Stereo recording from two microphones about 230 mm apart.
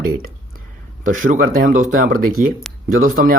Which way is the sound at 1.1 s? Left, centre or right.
Right.